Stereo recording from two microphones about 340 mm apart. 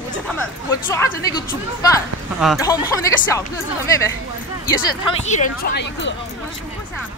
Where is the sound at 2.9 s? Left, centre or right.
Centre.